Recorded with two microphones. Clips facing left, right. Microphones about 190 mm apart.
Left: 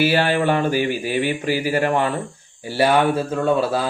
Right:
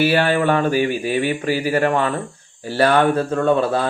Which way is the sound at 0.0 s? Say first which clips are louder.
Right 1 dB; 50° right (ahead or behind).